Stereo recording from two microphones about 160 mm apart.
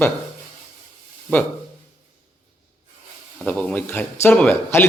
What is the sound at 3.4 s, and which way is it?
Speech, 5° left (ahead or behind).